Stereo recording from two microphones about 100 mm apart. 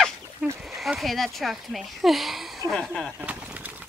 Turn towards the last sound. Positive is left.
turn(degrees=-15)  # may be behind; listen again after turning